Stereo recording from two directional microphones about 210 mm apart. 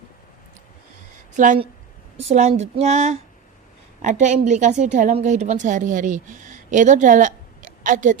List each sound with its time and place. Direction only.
1.4 s a woman's voice: 35° right (ahead or behind)